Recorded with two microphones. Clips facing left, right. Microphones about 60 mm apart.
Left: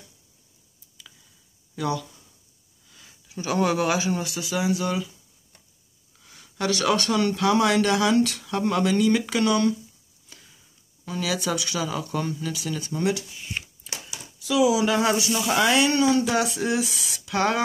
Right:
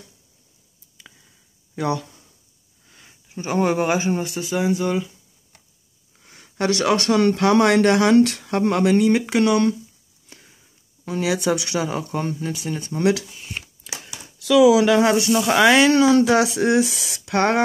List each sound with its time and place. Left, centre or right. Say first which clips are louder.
1.8 s speech: right 4 dB; right
6.1 s a sound: right 5 dB; right
6.7 s speech: right 4 dB; right
10.3 s sniff: right 3 dB; right
11.3 s speech: right 5 dB; right
14.2 s speech: right 7 dB; right
15.5 s speech: right 6 dB; right